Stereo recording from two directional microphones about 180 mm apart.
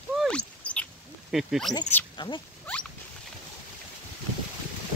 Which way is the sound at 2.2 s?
25° left (ahead or behind).